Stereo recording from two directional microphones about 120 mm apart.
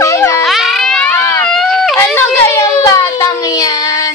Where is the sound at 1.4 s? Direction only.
5° left (ahead or behind).